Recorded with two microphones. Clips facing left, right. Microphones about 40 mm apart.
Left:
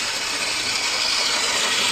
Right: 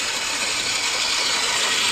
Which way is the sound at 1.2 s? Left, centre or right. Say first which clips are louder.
Even; centre.